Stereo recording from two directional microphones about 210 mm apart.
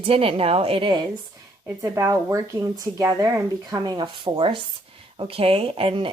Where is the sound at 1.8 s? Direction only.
15° right (ahead or behind).